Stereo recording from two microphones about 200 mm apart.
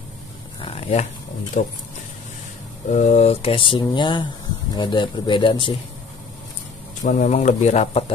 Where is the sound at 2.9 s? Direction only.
35° left (ahead or behind).